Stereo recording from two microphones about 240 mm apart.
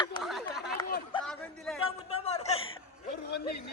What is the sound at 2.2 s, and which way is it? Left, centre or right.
Chuckle, left.